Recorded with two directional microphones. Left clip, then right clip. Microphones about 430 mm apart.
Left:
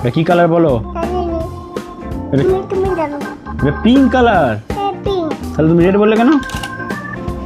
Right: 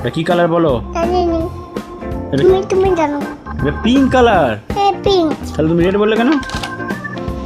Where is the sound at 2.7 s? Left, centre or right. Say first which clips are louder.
Right 3 dB; right.